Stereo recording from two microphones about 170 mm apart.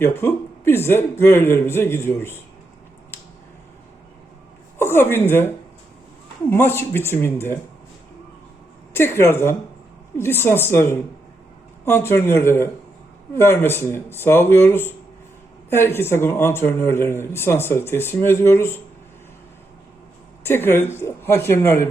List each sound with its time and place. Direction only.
0.0 s a man's voice: 15° left (ahead or behind)
4.8 s a woman's voice: 15° left (ahead or behind)
8.9 s a man's voice: 15° left (ahead or behind)
20.4 s a man's voice: 15° left (ahead or behind)